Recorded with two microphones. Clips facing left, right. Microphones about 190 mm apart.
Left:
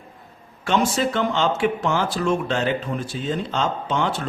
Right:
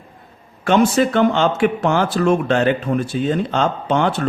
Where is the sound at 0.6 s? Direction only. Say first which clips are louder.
Right 6 dB; 55° right (ahead or behind).